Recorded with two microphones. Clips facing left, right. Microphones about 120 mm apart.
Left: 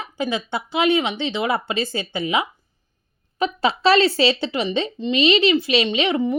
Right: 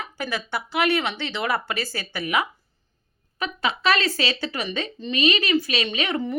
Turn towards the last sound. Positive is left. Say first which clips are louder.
# left 6 dB
turn(degrees=20)  # may be behind; listen again after turning